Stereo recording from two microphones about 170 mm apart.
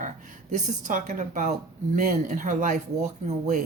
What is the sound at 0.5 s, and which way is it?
Speech, 45° right (ahead or behind).